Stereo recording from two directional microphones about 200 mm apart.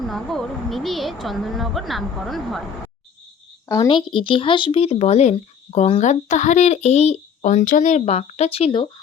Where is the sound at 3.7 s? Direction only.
20° left (ahead or behind).